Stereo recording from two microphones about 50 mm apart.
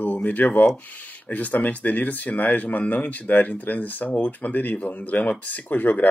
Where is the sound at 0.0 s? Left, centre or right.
Left.